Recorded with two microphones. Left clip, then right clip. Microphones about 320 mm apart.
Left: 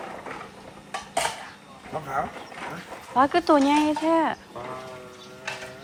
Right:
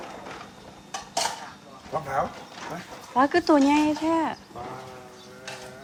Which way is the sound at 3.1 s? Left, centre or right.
Centre.